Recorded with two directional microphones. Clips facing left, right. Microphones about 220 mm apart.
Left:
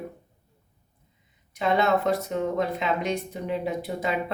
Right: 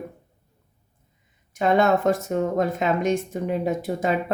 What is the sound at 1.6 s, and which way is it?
Speech, 45° right (ahead or behind).